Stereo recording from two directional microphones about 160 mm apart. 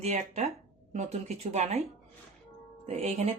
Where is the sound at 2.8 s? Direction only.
40° right (ahead or behind).